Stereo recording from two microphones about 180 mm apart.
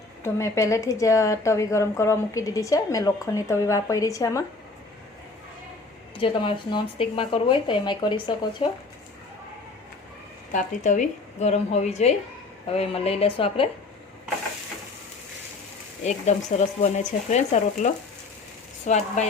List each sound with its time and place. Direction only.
0.2 s a woman's voice: 15° left (ahead or behind)
6.1 s speech: 30° left (ahead or behind)
10.5 s speech: 45° left (ahead or behind)
16.0 s speech: 40° left (ahead or behind)